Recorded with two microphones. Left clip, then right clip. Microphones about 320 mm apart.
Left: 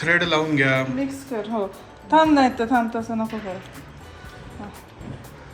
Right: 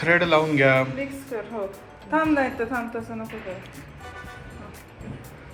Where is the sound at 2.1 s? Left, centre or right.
Left.